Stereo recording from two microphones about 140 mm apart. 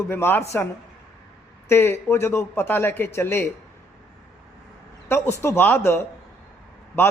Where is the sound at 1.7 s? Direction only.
15° left (ahead or behind).